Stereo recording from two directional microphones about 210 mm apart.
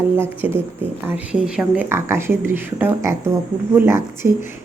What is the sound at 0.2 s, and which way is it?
Speech, 10° right (ahead or behind).